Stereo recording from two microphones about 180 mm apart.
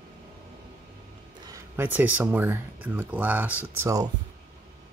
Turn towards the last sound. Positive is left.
turn(degrees=-20)  # may be behind; listen again after turning